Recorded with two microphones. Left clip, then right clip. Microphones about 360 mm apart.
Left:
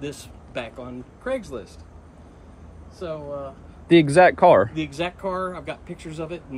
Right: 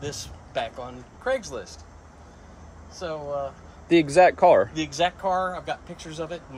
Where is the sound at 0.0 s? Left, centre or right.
Centre.